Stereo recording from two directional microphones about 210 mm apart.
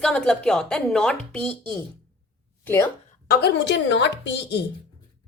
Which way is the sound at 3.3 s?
55° left (ahead or behind).